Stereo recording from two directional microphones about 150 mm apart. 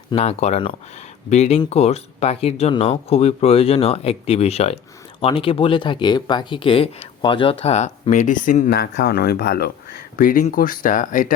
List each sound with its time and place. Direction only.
0.2 s speech: 45° left (ahead or behind)
7.6 s speech: 45° left (ahead or behind); by 9.7 s 90° left
10.2 s speech: 70° left (ahead or behind)